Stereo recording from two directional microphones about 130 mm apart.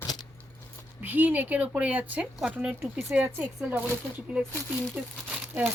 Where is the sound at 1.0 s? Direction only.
15° right (ahead or behind).